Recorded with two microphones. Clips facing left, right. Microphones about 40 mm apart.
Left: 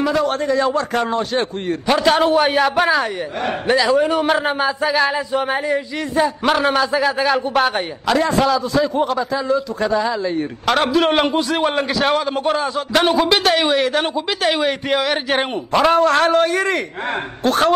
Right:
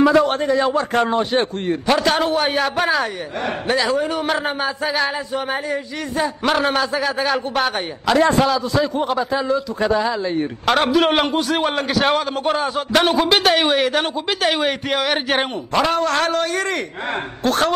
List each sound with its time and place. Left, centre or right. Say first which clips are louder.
0.0 s a man's voice: right 4 dB; right
1.7 s a man's voice: left 3 dB; centre
2.2 s a woman's voice: left 4 dB; left
2.8 s a man's voice: even; centre
3.9 s a man's voice: left 4 dB; left
5.7 s a woman's voice: left 3 dB; left
6.4 s a man's voice: right 1 dB; centre
9.0 s a man's voice: even; centre
15.7 s speech: left 5 dB; centre
17.4 s a man's voice: left 3 dB; centre